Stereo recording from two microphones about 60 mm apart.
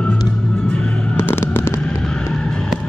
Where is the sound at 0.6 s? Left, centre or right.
Centre.